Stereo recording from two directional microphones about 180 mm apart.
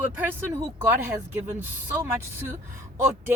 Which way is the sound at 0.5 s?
10° right (ahead or behind).